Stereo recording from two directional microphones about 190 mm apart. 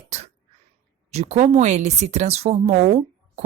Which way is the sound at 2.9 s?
35° right (ahead or behind).